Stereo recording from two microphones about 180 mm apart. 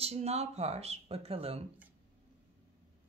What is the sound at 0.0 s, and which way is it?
A man's voice, 35° right (ahead or behind).